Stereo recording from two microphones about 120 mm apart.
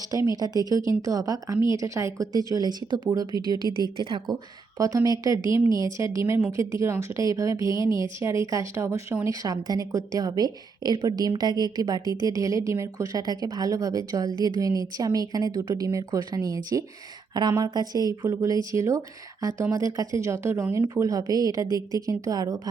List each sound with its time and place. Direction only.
0.1 s a woman's voice: 30° right (ahead or behind); by 4.4 s 45° right (ahead or behind)
4.8 s a woman's voice: 30° right (ahead or behind)